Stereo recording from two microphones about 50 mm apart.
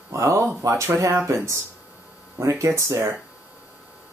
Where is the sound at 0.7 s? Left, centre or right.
Right.